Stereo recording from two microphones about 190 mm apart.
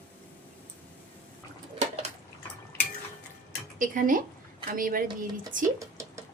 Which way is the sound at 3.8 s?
45° right (ahead or behind).